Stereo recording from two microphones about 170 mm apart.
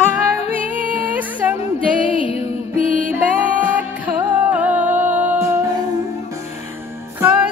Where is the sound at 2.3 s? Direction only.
35° left (ahead or behind).